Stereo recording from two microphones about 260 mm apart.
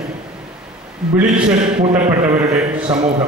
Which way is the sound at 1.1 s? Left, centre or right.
Centre.